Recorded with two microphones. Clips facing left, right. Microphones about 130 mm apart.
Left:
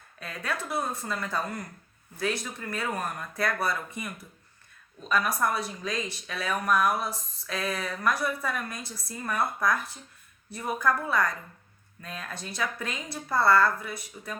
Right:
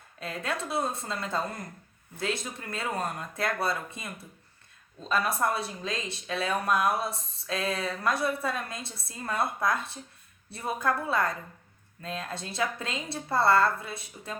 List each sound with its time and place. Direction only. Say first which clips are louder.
0.2 s speech: right 1 dB; 25° right (ahead or behind)